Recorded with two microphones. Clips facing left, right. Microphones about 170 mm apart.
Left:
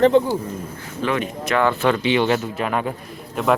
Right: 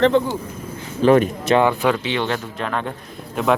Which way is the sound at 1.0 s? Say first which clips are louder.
Right 9 dB; 40° right (ahead or behind).